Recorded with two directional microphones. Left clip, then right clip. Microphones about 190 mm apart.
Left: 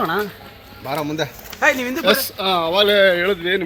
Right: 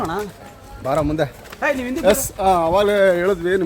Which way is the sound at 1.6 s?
25° left (ahead or behind).